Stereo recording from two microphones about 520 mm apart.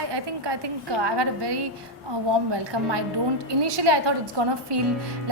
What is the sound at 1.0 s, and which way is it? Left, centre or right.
A woman's voice, right.